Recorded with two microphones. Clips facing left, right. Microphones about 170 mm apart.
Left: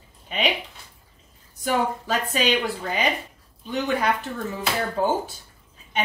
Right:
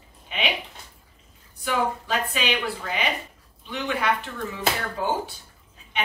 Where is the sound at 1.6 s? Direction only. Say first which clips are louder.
Left 2 dB; 40° left (ahead or behind).